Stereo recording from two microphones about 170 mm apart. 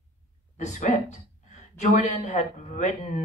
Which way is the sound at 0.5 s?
45° left (ahead or behind).